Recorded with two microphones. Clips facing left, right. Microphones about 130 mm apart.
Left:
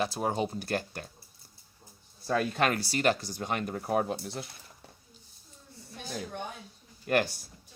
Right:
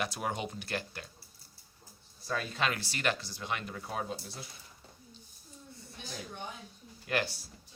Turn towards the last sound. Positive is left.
turn(degrees=50)  # may be behind; listen again after turning